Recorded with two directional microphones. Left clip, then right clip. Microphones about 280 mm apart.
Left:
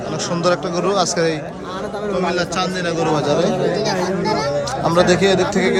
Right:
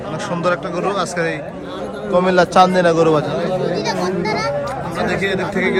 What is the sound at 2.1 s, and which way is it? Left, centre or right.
A man's voice, centre.